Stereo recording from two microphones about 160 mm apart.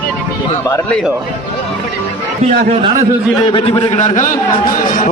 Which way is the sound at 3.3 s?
30° left (ahead or behind).